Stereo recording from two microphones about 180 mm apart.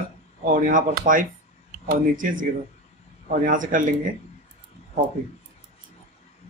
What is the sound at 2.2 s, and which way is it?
Speech, 45° right (ahead or behind).